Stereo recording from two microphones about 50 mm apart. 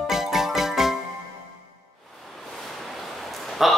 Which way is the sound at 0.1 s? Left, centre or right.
Centre.